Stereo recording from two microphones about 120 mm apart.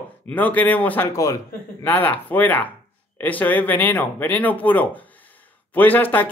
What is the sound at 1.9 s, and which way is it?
Speech, 15° left (ahead or behind).